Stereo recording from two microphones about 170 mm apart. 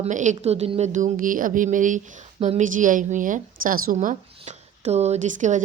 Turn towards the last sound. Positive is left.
turn(degrees=-45)  # may be behind; listen again after turning